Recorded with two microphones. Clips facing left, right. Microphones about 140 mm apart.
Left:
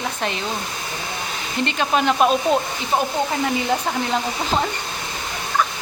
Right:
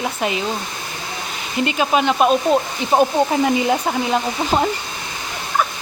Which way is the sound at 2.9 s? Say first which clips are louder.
Right 6 dB; 25° right (ahead or behind).